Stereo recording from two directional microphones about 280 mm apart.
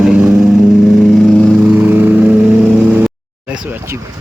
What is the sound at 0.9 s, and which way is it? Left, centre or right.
Vehicle, centre.